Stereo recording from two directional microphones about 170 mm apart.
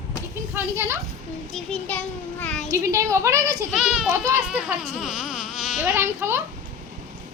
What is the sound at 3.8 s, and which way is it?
A woman's voice, 5° right (ahead or behind).